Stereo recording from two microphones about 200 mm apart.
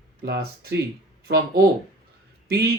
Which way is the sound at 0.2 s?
55° right (ahead or behind).